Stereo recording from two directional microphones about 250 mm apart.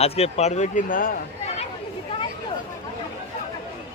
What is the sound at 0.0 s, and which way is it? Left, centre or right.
A man's voice, left.